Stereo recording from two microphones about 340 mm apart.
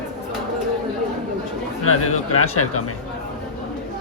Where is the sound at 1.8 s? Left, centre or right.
Left.